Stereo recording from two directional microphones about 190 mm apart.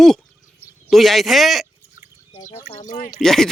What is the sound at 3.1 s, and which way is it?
Speech, centre (ahead or behind).